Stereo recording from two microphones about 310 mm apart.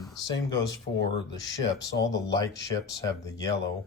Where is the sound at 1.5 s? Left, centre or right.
Left.